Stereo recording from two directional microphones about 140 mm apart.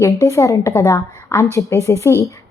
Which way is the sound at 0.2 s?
20° left (ahead or behind).